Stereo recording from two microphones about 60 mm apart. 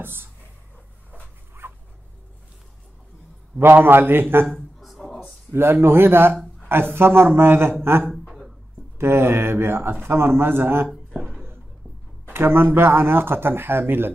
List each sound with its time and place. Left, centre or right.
0.0 s speech: right
1.6 s dog: right
3.5 s speech: right
4.7 s a sound: centre
5.5 s speech: right
8.1 s a sound: centre
8.9 s speech: right
10.9 s a sound: centre
12.3 s speech: right